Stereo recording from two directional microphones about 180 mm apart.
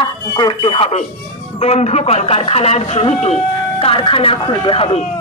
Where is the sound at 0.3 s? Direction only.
25° left (ahead or behind).